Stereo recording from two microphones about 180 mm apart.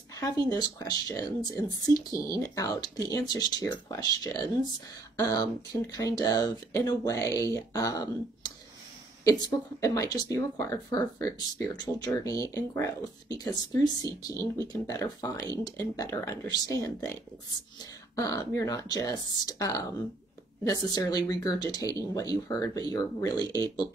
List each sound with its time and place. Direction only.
0.2 s speech: 20° left (ahead or behind)
18.1 s speech: 20° left (ahead or behind)